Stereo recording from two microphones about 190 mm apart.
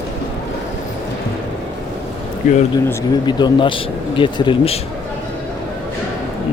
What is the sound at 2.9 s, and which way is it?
Speech, 20° left (ahead or behind).